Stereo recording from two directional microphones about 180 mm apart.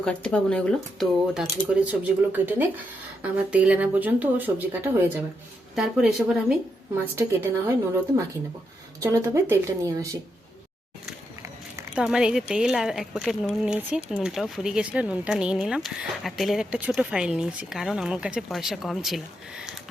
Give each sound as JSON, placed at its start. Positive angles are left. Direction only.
{"t": 0.0, "sound": "speech", "side_deg": 5}
{"t": 9.0, "sound": "speech", "side_deg": -15}
{"t": 11.9, "sound": "speech", "side_deg": -5}